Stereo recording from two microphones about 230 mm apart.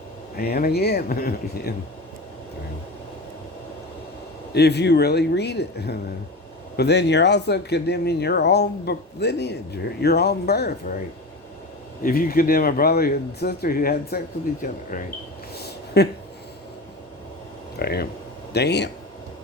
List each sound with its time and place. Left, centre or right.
0.3 s speech: left
4.5 s speech: left
12.0 s speech: left
15.5 s a sound: left
17.7 s speech: left